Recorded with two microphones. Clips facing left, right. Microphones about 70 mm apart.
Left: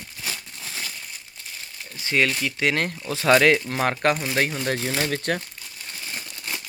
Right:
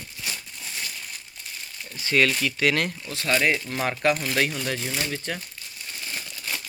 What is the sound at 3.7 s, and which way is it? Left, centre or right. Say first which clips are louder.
Speech: left 2 dB; left.